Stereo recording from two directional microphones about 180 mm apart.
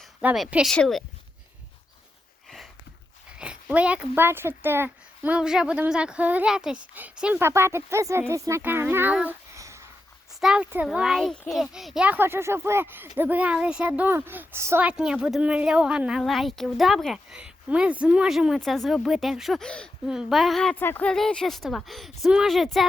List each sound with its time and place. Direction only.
0.0 s speech: 5° right (ahead or behind)
3.3 s a child's voice: 5° right (ahead or behind)
10.4 s speech: 5° right (ahead or behind)